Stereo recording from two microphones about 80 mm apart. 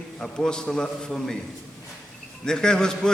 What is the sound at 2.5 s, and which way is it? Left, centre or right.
Speech, centre.